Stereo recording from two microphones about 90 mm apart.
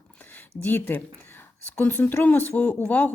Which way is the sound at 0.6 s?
20° left (ahead or behind).